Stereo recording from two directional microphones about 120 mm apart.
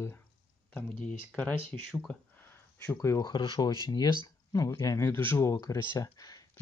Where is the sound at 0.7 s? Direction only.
10° left (ahead or behind).